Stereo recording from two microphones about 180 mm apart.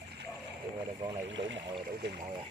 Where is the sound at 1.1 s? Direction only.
25° right (ahead or behind).